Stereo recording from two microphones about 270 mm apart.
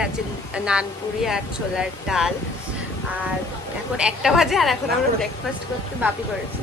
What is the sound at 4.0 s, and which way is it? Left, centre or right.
A woman's voice, centre.